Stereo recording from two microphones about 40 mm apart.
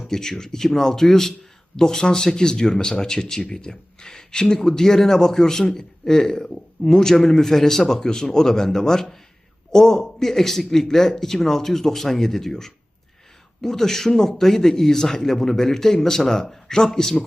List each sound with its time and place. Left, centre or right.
0.1 s speech: centre